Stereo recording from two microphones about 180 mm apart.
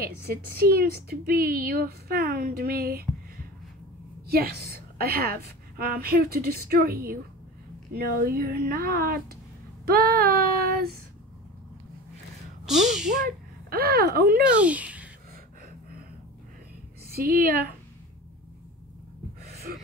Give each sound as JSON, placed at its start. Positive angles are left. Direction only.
{"t": 0.0, "sound": "a woman's voice", "side_deg": -55}
{"t": 4.3, "sound": "a woman's voice", "side_deg": -60}
{"t": 9.8, "sound": "child singing", "side_deg": -60}
{"t": 12.6, "sound": "speech", "side_deg": 0}
{"t": 13.7, "sound": "a woman's voice", "side_deg": -60}
{"t": 14.6, "sound": "speech", "side_deg": -5}
{"t": 17.1, "sound": "a woman's voice", "side_deg": -55}
{"t": 19.4, "sound": "a sound", "side_deg": -55}